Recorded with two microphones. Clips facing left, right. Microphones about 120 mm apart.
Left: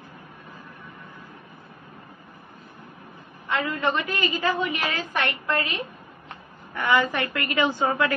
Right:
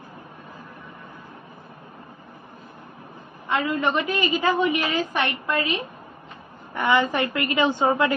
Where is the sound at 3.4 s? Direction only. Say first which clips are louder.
Right 2 dB; 20° right (ahead or behind).